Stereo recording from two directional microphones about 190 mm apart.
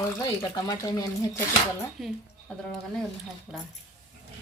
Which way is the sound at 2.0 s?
Centre (ahead or behind).